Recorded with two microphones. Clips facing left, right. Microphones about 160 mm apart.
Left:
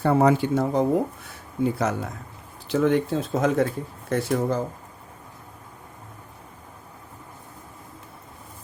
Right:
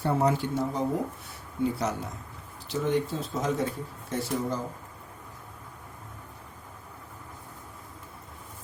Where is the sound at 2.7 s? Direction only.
80° left; by 4.6 s 55° left (ahead or behind).